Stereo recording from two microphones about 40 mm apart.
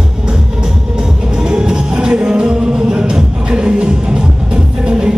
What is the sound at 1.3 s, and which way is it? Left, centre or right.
Music, centre.